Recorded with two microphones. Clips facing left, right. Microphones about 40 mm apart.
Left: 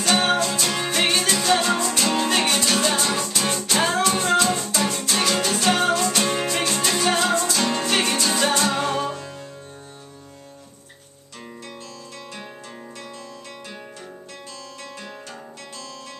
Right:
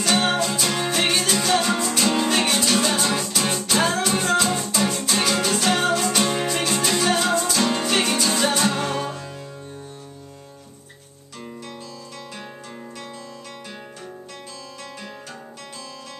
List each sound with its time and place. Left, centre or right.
0.0 s music: centre